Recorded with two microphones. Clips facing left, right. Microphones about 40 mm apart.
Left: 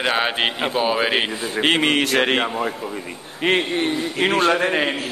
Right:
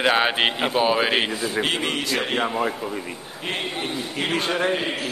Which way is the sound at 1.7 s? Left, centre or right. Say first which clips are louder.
Left 6 dB; left.